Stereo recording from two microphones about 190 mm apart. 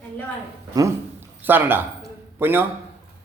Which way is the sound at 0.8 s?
15° right (ahead or behind).